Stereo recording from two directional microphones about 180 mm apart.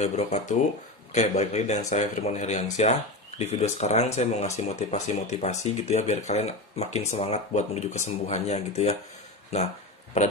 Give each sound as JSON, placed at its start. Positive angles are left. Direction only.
{"t": 0.0, "sound": "speech", "side_deg": 40}